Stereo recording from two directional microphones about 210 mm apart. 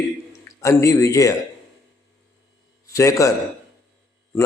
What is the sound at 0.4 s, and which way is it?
Speech, 15° left (ahead or behind).